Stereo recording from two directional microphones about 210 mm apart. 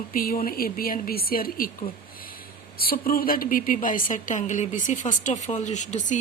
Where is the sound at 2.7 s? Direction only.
45° left (ahead or behind).